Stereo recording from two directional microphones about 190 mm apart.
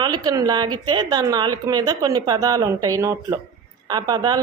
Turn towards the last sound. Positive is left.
turn(degrees=-20)  # may be behind; listen again after turning